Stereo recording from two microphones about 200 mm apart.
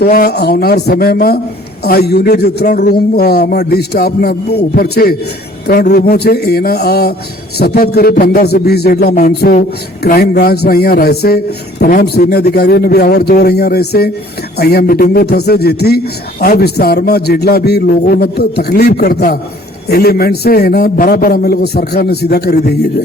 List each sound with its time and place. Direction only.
0.0 s a man's voice: 50° left (ahead or behind)